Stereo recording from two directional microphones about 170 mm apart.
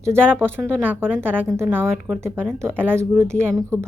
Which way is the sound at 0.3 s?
10° right (ahead or behind).